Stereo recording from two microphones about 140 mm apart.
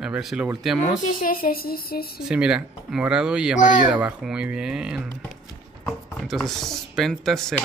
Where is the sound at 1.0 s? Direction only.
80° left.